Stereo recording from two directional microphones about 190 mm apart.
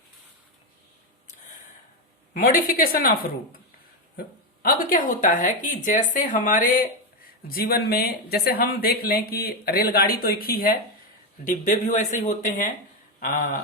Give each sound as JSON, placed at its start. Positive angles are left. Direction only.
{"t": 2.3, "sound": "speech", "side_deg": 45}
{"t": 4.6, "sound": "speech", "side_deg": 50}